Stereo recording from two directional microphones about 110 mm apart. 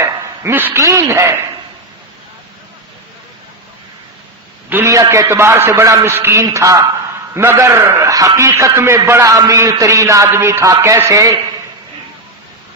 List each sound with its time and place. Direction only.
0.0 s a man's voice: 20° right (ahead or behind)
4.7 s a man's voice: 25° right (ahead or behind)